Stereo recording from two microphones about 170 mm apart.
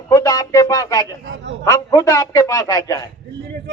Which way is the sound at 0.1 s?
20° left (ahead or behind).